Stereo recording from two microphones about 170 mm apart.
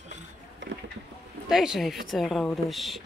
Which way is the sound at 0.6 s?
90° right.